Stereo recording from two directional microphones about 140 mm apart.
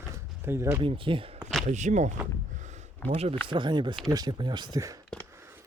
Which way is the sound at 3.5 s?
35° right (ahead or behind).